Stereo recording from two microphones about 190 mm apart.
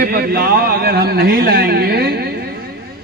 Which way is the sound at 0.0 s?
50° right (ahead or behind).